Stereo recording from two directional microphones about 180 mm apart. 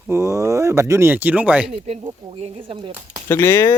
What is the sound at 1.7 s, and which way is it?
Speech, 35° right (ahead or behind).